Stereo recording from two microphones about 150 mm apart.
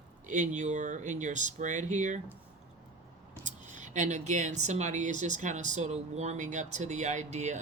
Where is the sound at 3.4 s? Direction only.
55° right (ahead or behind).